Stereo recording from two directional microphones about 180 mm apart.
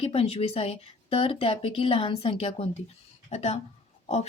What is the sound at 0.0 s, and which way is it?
Speech, 35° left (ahead or behind).